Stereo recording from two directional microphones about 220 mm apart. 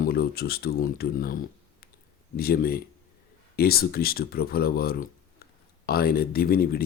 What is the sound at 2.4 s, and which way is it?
Speech, 45° left (ahead or behind).